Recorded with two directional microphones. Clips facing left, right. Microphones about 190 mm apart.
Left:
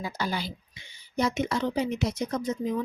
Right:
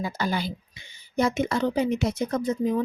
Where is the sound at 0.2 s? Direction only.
50° right (ahead or behind).